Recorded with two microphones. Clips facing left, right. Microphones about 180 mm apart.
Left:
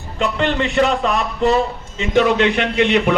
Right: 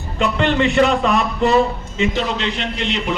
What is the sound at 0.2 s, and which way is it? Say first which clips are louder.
A man's voice: right 2 dB; 40° left (ahead or behind).